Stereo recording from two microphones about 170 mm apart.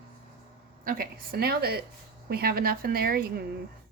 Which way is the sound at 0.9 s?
60° right (ahead or behind).